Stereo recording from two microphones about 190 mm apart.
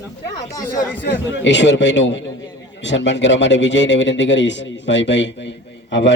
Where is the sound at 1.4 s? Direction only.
70° left (ahead or behind).